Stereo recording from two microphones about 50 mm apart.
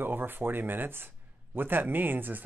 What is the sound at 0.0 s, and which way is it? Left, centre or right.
Speech, right.